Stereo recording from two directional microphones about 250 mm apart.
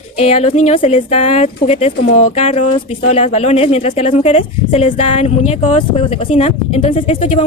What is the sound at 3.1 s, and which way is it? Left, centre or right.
Speech, left.